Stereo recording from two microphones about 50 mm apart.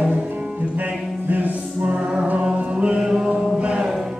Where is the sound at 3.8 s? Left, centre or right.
Centre.